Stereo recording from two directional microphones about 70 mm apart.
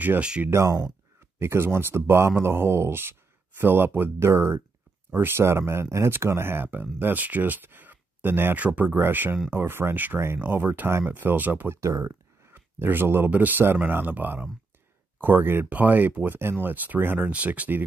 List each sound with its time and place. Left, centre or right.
0.5 s speech: right
11.8 s speech: right